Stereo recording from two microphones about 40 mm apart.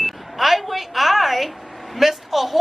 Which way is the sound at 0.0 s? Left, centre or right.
Centre.